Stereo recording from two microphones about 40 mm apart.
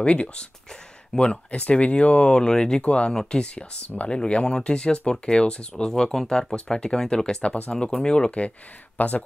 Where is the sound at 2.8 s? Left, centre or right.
Left.